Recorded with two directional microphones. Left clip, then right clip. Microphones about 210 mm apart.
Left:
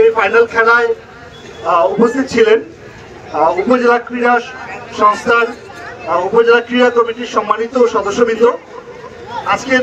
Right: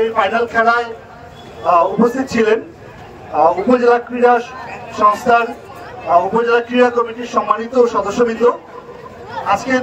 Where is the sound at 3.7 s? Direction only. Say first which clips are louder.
Left 1 dB; 55° right (ahead or behind).